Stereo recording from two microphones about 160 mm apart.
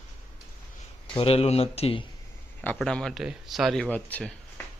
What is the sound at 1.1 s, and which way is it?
Speech, 35° left (ahead or behind).